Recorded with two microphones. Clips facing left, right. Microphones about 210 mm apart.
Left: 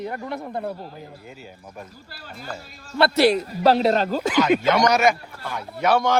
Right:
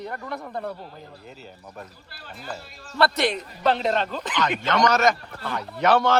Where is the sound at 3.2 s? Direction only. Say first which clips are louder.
Left 6 dB; 40° left (ahead or behind).